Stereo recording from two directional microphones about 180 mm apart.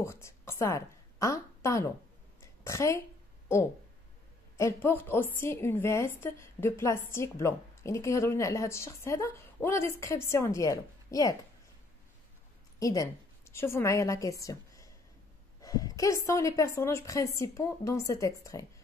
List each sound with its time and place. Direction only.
0.0 s a woman's voice: 15° left (ahead or behind)
4.6 s a woman's voice: 15° left (ahead or behind)
12.7 s a woman's voice: 20° left (ahead or behind)